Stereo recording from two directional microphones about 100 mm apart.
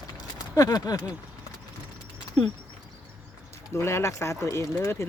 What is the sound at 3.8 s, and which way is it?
Speech, 25° left (ahead or behind).